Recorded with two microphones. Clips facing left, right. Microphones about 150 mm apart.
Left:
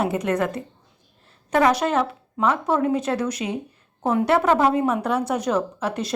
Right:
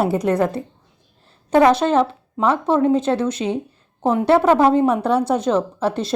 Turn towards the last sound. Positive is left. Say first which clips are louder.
# right 5 dB
turn(degrees=-30)  # may be behind; listen again after turning